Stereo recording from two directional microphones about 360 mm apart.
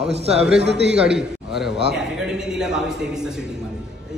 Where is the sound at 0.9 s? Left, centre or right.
Centre.